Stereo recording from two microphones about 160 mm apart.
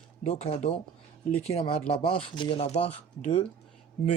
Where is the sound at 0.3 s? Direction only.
40° left (ahead or behind).